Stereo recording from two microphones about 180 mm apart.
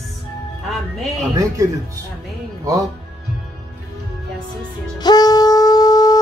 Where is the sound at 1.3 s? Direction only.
20° right (ahead or behind).